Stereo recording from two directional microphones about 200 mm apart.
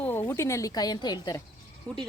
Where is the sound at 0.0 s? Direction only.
10° left (ahead or behind).